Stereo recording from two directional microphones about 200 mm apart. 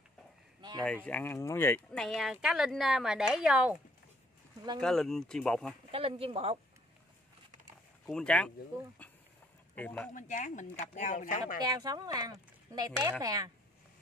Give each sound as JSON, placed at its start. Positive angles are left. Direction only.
{"t": 1.0, "sound": "a woman's voice", "side_deg": 10}
{"t": 4.7, "sound": "a woman's voice", "side_deg": 5}
{"t": 5.9, "sound": "speech", "side_deg": -30}
{"t": 8.1, "sound": "a woman's voice", "side_deg": 5}
{"t": 9.8, "sound": "speech", "side_deg": 5}
{"t": 10.1, "sound": "speech", "side_deg": 40}
{"t": 11.6, "sound": "speech", "side_deg": -20}